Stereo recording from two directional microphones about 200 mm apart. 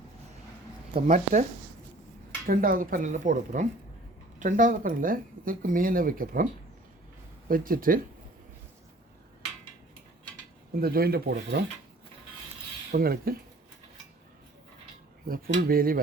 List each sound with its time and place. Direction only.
1.0 s speech: 40° right (ahead or behind)
2.5 s speech: 45° right (ahead or behind)
10.8 s speech: 50° right (ahead or behind)
12.9 s speech: 50° right (ahead or behind)
15.3 s speech: 50° right (ahead or behind)